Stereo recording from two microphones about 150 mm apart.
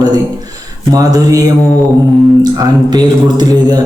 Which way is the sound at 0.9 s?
25° right (ahead or behind).